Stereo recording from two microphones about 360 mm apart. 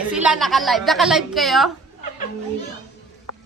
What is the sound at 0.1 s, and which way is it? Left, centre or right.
A woman's voice, centre.